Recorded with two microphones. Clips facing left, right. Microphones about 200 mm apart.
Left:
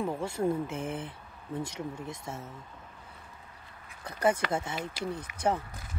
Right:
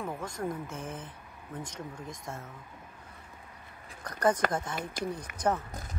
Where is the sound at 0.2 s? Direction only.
30° left (ahead or behind).